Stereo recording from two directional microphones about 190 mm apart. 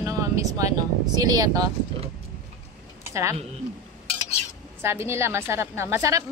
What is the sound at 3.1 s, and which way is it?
Speech, 15° right (ahead or behind).